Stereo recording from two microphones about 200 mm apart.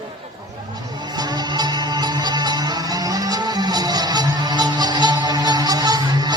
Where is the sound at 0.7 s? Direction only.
20° right (ahead or behind).